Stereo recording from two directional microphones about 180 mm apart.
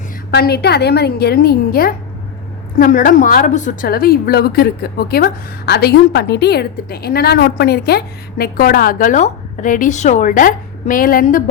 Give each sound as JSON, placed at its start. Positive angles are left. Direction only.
{"t": 0.3, "sound": "a woman's voice", "side_deg": 60}